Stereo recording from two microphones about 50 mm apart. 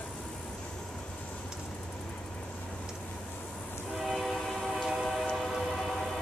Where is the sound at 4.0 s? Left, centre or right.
Centre.